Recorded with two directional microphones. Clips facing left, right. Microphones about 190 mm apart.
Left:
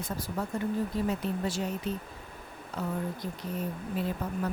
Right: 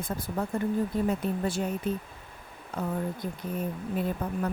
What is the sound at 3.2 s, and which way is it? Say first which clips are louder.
Speech: right 2 dB; 50° right (ahead or behind).